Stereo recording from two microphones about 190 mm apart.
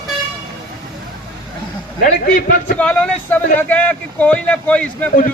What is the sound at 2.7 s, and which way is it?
A man's voice, 5° left (ahead or behind).